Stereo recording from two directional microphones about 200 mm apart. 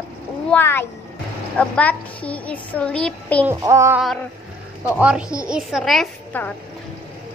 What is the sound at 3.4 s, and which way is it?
Child singing, 15° right (ahead or behind).